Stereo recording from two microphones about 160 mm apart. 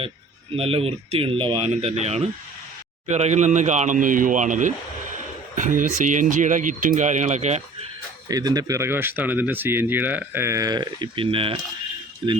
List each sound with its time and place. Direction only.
0.5 s speech: 35° right (ahead or behind)
8.3 s speech: 25° right (ahead or behind)